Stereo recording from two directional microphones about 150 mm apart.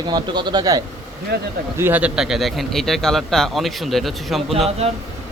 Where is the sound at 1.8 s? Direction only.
10° right (ahead or behind).